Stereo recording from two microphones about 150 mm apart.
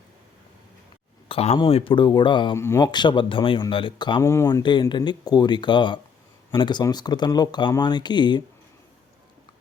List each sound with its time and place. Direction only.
1.3 s speech: 40° left (ahead or behind)
2.6 s speech: 20° left (ahead or behind)
2.8 s speech: 30° left (ahead or behind)
4.2 s speech: 20° left (ahead or behind)
4.6 s speech: 30° left (ahead or behind)